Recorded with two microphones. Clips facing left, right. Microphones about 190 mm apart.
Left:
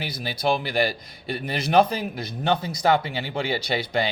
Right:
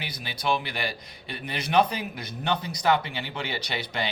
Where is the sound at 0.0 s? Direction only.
35° left (ahead or behind).